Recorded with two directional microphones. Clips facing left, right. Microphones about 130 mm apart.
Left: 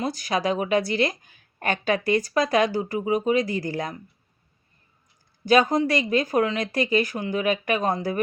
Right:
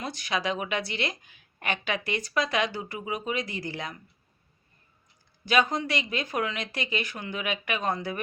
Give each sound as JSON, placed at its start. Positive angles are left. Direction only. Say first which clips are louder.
{"t": 0.0, "sound": "speech", "louder": "left 6 dB", "side_deg": 40}
{"t": 5.5, "sound": "speech", "louder": "left 6 dB", "side_deg": 40}